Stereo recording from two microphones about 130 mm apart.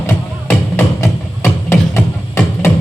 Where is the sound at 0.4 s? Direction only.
20° left (ahead or behind).